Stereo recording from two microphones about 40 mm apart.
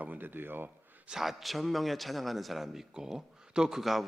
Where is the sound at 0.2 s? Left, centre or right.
Right.